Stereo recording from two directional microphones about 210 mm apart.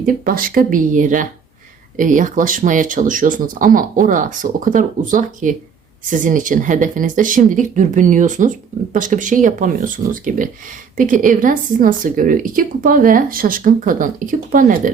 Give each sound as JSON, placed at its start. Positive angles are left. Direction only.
{"t": 0.0, "sound": "speech", "side_deg": -40}